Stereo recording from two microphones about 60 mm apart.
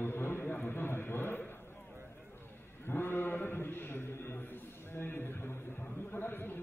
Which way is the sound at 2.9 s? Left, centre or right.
Left.